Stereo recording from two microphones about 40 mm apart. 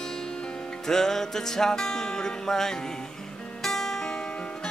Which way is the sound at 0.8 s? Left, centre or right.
Centre.